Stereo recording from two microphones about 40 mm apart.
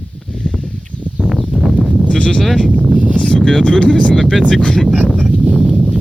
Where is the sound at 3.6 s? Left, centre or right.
Left.